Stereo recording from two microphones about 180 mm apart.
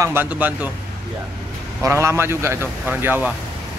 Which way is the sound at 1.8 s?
15° right (ahead or behind).